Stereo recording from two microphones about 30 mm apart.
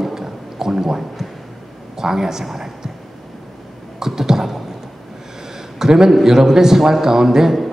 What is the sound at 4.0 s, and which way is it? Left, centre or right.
Speech, centre.